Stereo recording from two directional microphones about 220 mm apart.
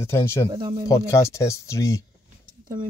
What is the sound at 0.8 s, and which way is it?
Speech, 15° left (ahead or behind).